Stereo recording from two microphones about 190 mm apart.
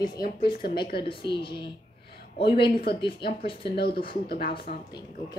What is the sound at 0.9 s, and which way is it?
Speech, 25° left (ahead or behind).